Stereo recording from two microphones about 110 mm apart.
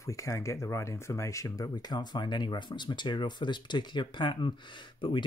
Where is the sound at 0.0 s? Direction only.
30° left (ahead or behind).